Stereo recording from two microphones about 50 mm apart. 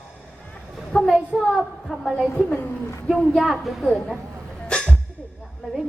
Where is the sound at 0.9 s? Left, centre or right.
Centre.